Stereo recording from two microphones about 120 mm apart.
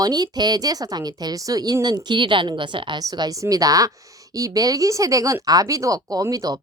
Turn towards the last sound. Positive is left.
turn(degrees=-30)  # may be behind; listen again after turning